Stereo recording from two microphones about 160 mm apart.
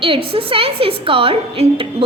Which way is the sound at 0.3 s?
35° right (ahead or behind).